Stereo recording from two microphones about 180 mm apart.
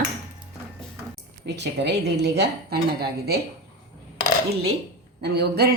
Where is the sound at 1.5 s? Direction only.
70° right (ahead or behind).